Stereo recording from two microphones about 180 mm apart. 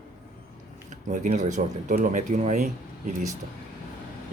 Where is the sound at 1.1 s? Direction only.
45° right (ahead or behind).